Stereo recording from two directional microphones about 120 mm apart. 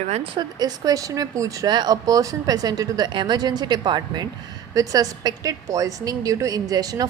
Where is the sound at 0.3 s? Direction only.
30° right (ahead or behind).